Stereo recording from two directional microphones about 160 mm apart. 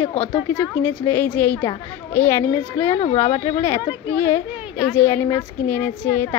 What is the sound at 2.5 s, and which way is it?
A woman's voice, 25° left (ahead or behind).